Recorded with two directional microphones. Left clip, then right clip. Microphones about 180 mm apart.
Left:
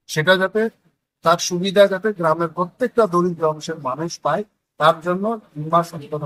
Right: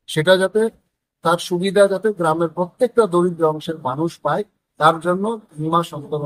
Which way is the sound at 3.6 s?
5° right (ahead or behind).